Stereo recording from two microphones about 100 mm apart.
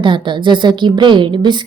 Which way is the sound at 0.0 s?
55° right (ahead or behind).